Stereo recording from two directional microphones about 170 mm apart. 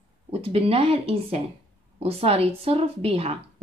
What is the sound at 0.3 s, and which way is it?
Speech, 35° right (ahead or behind).